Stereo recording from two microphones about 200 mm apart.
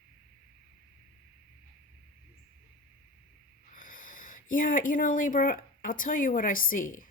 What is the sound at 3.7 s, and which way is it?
A woman's voice, 45° left (ahead or behind).